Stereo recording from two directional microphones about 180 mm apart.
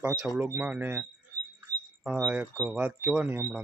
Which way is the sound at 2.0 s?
10° right (ahead or behind).